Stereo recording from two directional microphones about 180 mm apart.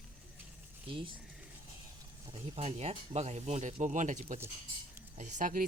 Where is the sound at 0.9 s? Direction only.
30° right (ahead or behind).